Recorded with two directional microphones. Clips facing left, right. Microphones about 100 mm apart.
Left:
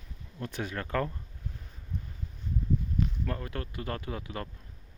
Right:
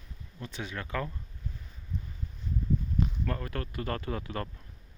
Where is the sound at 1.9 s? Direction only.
60° left (ahead or behind).